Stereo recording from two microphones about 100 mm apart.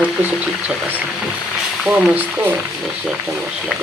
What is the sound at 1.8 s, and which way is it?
Speech, 15° right (ahead or behind).